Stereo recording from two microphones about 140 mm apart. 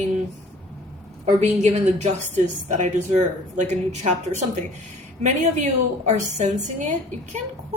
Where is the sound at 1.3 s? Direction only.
50° right (ahead or behind).